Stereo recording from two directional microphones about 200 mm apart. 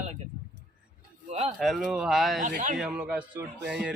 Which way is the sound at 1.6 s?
Centre (ahead or behind).